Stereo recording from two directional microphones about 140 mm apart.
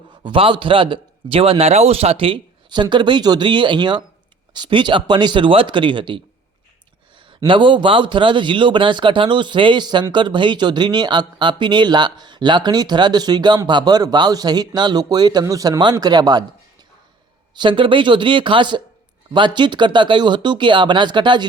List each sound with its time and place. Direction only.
0.2 s speech: 35° right (ahead or behind)
7.3 s a man's voice: 35° right (ahead or behind)
17.5 s speech: 35° right (ahead or behind)